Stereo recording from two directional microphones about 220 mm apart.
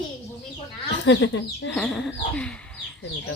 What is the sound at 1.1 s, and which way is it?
Speech, 55° left (ahead or behind).